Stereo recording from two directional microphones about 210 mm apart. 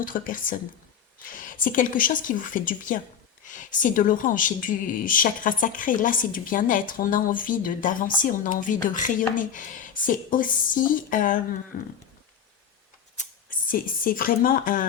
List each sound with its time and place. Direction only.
0.0 s speech: 40° left (ahead or behind)
13.1 s speech: 40° left (ahead or behind)